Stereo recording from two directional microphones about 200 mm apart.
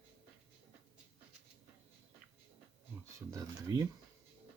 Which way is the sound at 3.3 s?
15° right (ahead or behind).